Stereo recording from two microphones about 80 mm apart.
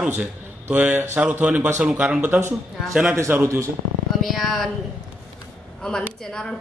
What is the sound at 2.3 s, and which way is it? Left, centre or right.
Speech, right.